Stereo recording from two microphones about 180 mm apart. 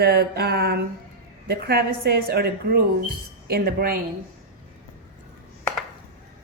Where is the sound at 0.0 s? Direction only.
60° right (ahead or behind).